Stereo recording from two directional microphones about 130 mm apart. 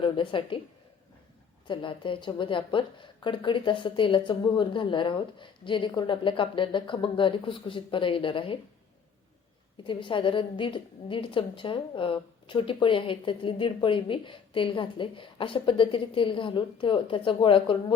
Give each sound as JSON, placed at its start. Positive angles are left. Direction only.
{"t": 0.0, "sound": "a woman's voice", "side_deg": 40}
{"t": 1.6, "sound": "a woman's voice", "side_deg": 40}
{"t": 9.8, "sound": "a woman's voice", "side_deg": 40}